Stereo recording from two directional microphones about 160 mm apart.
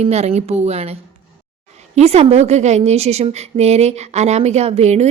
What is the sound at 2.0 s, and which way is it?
A woman's voice, 40° right (ahead or behind).